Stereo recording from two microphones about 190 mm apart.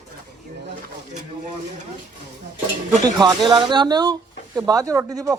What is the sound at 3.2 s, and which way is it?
Speech, 25° right (ahead or behind).